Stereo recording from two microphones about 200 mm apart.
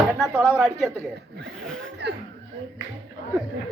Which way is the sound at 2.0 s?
60° right (ahead or behind).